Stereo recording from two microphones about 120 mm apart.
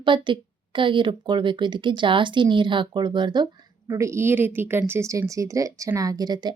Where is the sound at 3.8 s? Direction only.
25° right (ahead or behind).